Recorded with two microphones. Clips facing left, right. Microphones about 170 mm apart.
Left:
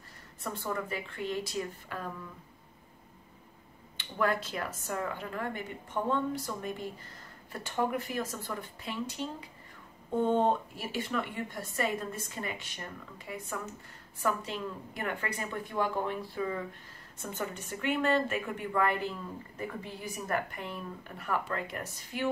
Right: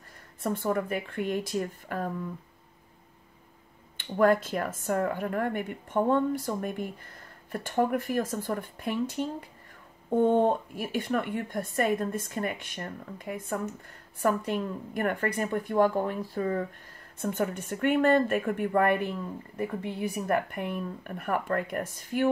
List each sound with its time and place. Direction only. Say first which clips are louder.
0.4 s a woman's voice: right 7 dB; 55° right (ahead or behind)
3.9 s a woman's voice: right 8 dB; 50° right (ahead or behind)
17.2 s a woman's voice: right 8 dB; 55° right (ahead or behind)